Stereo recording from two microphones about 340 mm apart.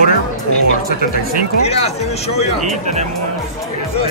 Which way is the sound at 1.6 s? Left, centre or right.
Centre.